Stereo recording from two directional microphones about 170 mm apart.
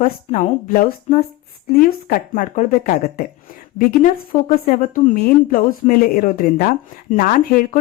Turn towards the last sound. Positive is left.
turn(degrees=55)  # may be behind; listen again after turning